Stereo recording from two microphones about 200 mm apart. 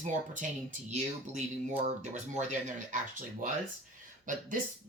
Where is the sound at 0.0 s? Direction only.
40° right (ahead or behind).